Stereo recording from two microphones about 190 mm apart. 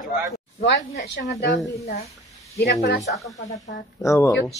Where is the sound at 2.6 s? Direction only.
60° left (ahead or behind).